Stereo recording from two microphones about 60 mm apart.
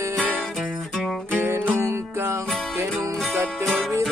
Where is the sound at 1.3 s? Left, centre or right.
Right.